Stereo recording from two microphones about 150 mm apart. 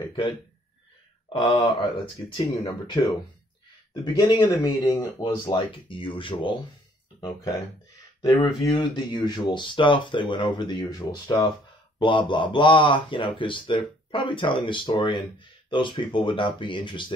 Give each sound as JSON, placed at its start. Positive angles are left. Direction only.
{"t": 0.0, "sound": "speech", "side_deg": 30}
{"t": 8.2, "sound": "speech", "side_deg": 35}